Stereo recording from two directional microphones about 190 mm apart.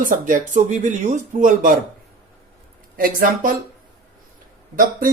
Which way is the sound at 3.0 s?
50° right (ahead or behind).